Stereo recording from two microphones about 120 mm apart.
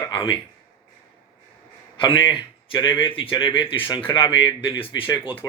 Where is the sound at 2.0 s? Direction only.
40° left (ahead or behind).